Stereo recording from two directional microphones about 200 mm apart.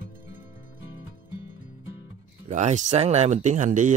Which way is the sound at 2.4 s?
35° right (ahead or behind).